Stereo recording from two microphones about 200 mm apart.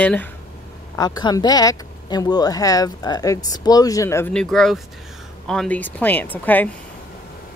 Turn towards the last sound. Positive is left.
turn(degrees=10)  # may be behind; listen again after turning